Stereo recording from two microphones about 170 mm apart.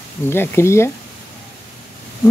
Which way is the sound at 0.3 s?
15° left (ahead or behind).